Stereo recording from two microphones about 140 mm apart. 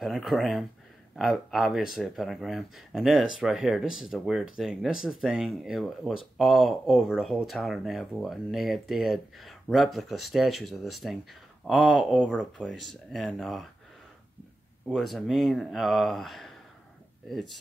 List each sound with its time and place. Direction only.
0.0 s speech: centre (ahead or behind)
14.9 s speech: centre (ahead or behind)